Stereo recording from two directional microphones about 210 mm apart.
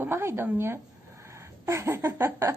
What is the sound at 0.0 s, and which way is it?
A woman's voice, 10° right (ahead or behind).